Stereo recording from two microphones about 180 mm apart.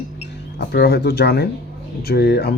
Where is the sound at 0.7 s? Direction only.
65° left (ahead or behind).